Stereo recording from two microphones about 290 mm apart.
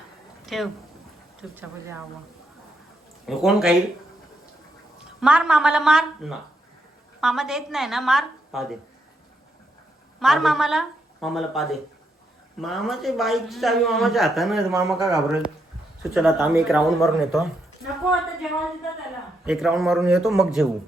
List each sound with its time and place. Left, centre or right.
0.4 s speech: centre
3.2 s a man's voice: centre
5.2 s a man's voice: centre
10.2 s a man's voice: centre
19.5 s a man's voice: centre